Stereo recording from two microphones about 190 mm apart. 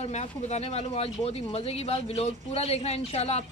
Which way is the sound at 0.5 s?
35° left (ahead or behind).